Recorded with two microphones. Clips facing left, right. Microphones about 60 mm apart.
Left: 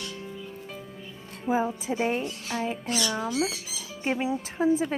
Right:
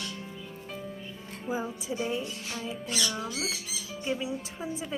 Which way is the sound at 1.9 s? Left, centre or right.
Left.